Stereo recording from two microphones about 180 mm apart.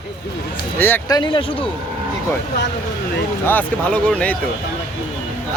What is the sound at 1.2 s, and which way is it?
Speech, 25° left (ahead or behind).